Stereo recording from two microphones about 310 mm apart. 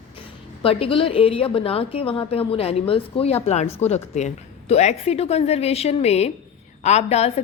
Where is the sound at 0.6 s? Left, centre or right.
Centre.